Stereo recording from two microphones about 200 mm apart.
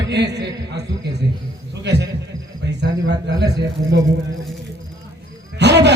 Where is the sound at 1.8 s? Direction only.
60° right (ahead or behind).